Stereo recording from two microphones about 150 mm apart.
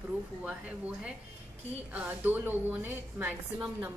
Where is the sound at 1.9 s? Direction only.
10° right (ahead or behind).